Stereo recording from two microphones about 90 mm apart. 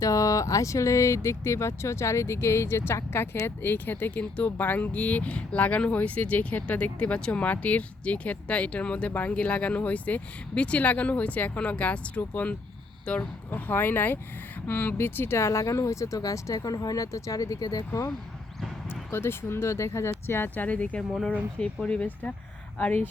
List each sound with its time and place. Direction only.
0.0 s speech: 40° left (ahead or behind)
18.9 s speech: 25° left (ahead or behind)